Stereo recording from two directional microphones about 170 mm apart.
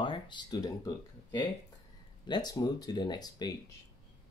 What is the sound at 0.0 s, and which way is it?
Speech, 30° left (ahead or behind).